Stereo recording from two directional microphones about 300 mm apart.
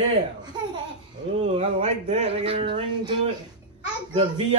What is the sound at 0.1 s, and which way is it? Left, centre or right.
Speech, centre.